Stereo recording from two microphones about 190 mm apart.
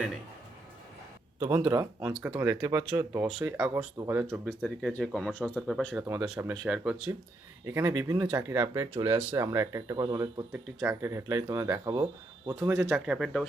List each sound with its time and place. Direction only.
1.4 s speech: 15° right (ahead or behind)
4.3 s speech: 5° left (ahead or behind)
7.6 s speech: 15° right (ahead or behind)
10.5 s speech: 10° right (ahead or behind)